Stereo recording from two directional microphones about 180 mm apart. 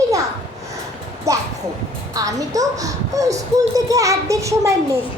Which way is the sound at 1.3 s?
20° right (ahead or behind).